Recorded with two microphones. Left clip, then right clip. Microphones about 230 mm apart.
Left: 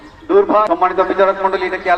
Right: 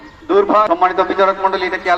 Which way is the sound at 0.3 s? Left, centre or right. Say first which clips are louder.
Even; right.